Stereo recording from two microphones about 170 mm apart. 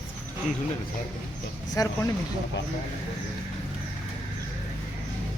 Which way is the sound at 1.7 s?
20° left (ahead or behind).